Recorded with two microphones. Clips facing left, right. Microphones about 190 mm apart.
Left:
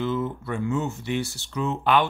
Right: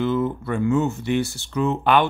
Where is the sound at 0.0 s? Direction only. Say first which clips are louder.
Right 5 dB; 60° right (ahead or behind).